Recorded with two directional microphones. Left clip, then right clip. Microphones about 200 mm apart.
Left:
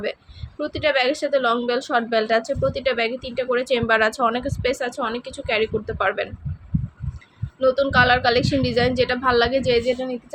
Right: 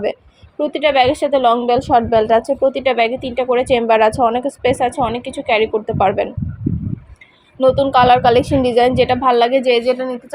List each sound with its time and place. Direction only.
0.6 s a woman's voice: 15° right (ahead or behind)
7.6 s a woman's voice: 15° right (ahead or behind)